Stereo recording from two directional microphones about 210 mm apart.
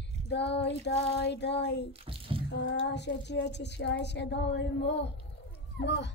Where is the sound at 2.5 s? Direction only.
55° left (ahead or behind).